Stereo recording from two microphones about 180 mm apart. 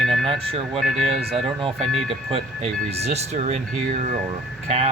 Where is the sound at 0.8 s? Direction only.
Centre (ahead or behind).